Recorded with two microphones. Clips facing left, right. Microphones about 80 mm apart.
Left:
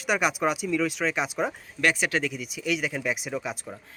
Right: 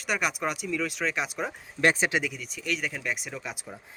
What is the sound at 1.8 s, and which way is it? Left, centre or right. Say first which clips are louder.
Speech: right 1 dB; right.